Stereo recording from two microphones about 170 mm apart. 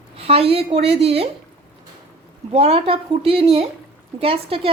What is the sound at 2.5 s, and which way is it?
A woman's voice, 35° right (ahead or behind).